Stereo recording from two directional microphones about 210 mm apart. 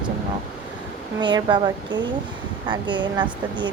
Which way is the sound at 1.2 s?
20° right (ahead or behind).